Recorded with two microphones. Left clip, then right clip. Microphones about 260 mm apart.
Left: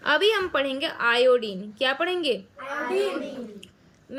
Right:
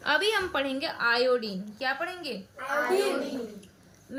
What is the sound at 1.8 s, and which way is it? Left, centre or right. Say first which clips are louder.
Speech: left 6 dB; left.